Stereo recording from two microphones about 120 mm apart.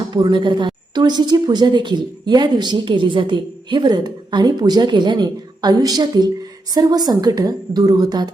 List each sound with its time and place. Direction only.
0.1 s speech: 40° right (ahead or behind)